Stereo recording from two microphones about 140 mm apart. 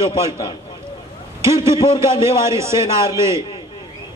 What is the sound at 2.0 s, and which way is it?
Speech, 20° right (ahead or behind).